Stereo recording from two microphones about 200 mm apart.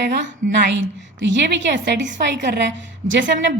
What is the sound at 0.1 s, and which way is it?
A woman's voice, 65° right (ahead or behind).